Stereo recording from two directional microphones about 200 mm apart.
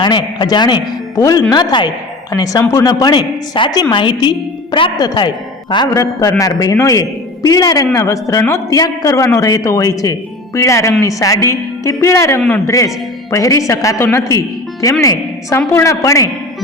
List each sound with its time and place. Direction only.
0.0 s a man's voice: 20° left (ahead or behind)